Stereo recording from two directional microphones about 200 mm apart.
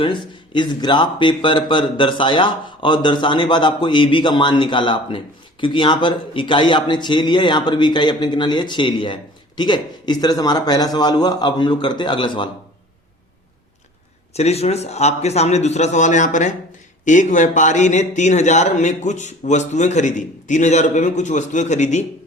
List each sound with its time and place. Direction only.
0.0 s speech: 25° left (ahead or behind)
14.3 s a man's voice: 30° left (ahead or behind)